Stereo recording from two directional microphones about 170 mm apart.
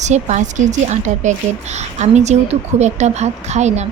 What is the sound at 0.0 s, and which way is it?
A woman's voice, 45° right (ahead or behind).